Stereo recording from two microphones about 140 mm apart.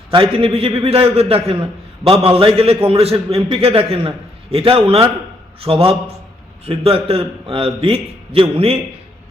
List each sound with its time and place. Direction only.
0.1 s a man's voice: 40° right (ahead or behind)